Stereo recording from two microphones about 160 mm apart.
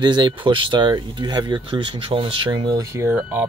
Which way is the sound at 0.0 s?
30° right (ahead or behind).